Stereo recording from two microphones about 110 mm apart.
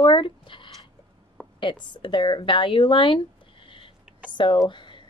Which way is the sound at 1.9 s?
45° left (ahead or behind).